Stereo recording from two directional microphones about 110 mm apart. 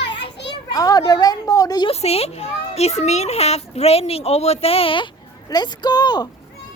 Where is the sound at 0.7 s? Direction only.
35° left (ahead or behind).